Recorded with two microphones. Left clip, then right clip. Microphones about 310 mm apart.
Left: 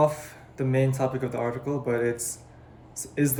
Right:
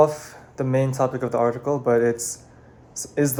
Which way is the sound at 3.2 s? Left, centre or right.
Centre.